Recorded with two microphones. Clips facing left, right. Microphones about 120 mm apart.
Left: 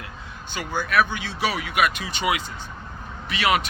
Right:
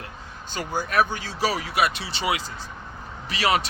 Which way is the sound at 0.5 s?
40° right (ahead or behind).